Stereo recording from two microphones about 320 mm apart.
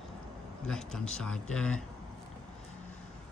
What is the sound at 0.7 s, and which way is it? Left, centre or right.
Speech, centre.